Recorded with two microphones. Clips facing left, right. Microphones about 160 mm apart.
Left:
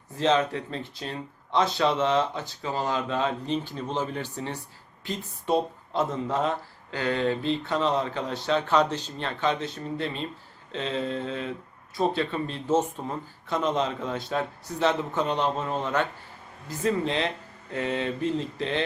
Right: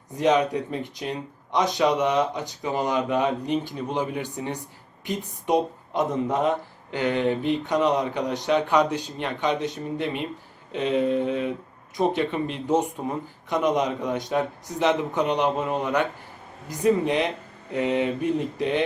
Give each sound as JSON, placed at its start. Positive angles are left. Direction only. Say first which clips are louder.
{"t": 0.2, "sound": "speech", "louder": "right 3 dB", "side_deg": -15}